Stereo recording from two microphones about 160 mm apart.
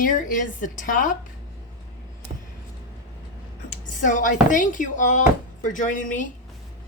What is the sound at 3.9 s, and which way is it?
Speech, 55° left (ahead or behind).